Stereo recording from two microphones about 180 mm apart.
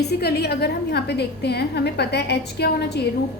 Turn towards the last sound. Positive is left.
turn(degrees=65)  # may be behind; listen again after turning